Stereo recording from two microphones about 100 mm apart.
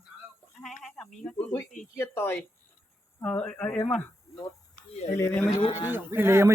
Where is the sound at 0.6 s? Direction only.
5° left (ahead or behind).